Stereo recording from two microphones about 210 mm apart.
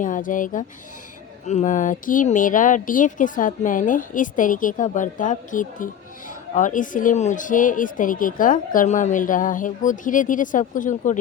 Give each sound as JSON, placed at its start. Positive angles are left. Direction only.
{"t": 0.0, "sound": "speech", "side_deg": 40}